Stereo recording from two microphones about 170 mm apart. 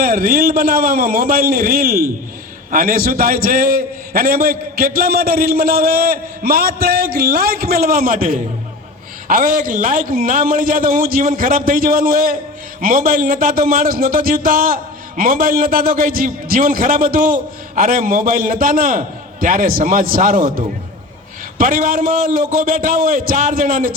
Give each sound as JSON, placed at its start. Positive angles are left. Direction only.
{"t": 0.0, "sound": "a man's voice", "side_deg": -60}